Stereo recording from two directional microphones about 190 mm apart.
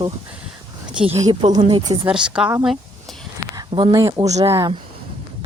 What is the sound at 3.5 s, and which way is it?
Speech, 25° right (ahead or behind).